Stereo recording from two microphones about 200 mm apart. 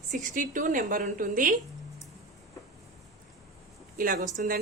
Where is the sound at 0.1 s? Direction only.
40° right (ahead or behind).